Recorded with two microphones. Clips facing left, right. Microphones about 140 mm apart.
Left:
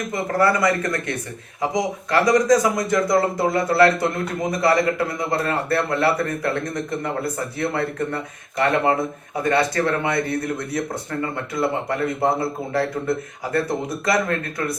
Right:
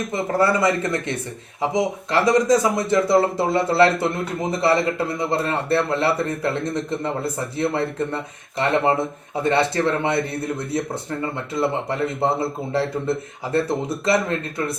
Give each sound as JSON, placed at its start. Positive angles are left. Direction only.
{"t": 0.1, "sound": "a man's voice", "side_deg": -25}